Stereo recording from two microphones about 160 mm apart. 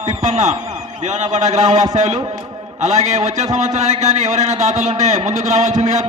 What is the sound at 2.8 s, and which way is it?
A man's voice, 45° right (ahead or behind).